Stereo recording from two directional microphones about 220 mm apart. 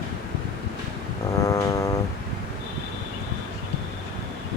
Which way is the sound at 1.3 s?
15° left (ahead or behind).